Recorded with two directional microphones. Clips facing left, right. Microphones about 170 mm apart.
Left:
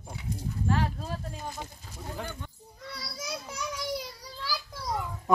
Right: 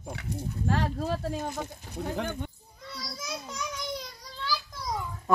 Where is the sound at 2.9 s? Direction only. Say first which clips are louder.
Right 1 dB; 10° left (ahead or behind).